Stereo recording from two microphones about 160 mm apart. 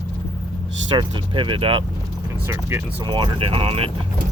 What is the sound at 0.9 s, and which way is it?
Speech, 30° right (ahead or behind).